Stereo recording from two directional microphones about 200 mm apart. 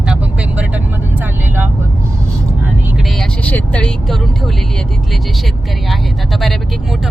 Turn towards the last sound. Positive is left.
turn(degrees=0)  # may be behind; listen again after turning